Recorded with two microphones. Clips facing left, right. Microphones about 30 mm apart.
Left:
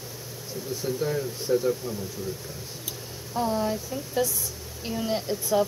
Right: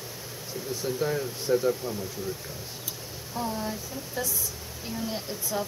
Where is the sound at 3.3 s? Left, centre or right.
Left.